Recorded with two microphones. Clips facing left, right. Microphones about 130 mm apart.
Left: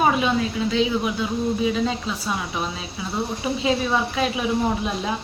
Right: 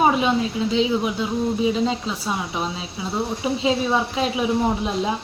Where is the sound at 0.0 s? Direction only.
25° right (ahead or behind).